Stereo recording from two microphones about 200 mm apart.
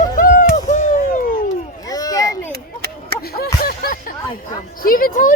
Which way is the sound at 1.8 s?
20° left (ahead or behind).